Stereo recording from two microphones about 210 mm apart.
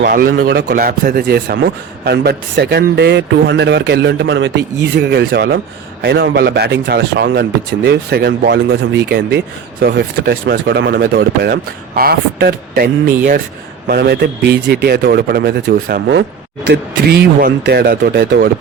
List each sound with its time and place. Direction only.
0.0 s speech: 45° right (ahead or behind)